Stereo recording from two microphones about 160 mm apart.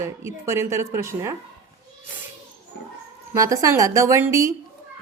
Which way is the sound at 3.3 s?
20° right (ahead or behind).